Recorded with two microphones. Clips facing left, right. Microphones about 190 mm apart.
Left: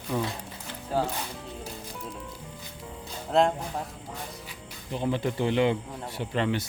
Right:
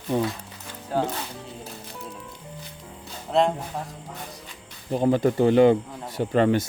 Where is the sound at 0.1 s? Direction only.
25° right (ahead or behind).